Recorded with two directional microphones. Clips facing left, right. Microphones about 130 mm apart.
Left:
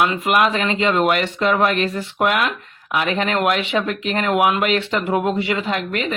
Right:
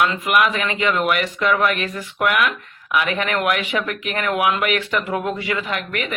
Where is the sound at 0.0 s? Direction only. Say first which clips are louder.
Left 1 dB; 30° left (ahead or behind).